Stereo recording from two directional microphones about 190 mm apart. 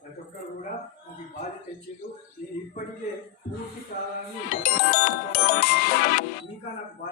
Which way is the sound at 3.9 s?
50° left (ahead or behind).